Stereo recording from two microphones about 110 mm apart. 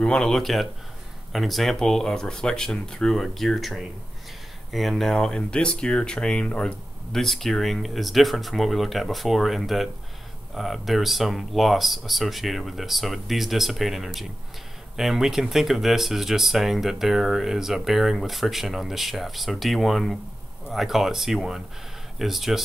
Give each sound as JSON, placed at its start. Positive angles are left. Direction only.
{"t": 0.0, "sound": "speech", "side_deg": 10}